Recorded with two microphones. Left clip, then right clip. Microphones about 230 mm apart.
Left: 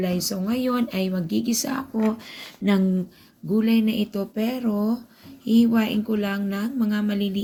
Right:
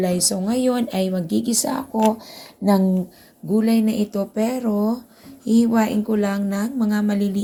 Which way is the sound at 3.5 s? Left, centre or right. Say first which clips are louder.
Right 3 dB; centre.